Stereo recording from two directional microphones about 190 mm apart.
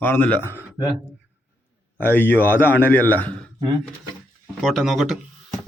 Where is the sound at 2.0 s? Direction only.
10° left (ahead or behind).